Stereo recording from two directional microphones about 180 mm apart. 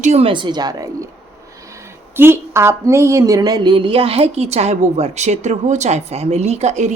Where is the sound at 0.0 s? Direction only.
35° right (ahead or behind).